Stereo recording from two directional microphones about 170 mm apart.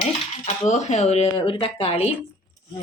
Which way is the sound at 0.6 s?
45° left (ahead or behind).